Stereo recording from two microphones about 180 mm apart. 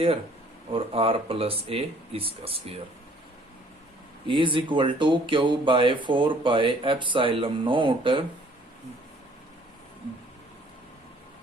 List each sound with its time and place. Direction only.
0.7 s speech: 30° right (ahead or behind)
4.3 s speech: 30° right (ahead or behind)